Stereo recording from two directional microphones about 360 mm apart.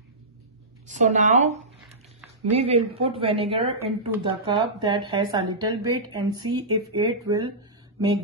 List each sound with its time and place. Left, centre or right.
0.8 s a woman's voice: centre